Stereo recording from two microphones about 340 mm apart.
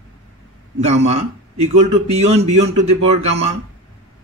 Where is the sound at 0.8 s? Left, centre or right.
Centre.